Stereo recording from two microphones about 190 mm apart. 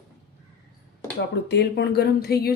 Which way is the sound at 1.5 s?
60° left (ahead or behind).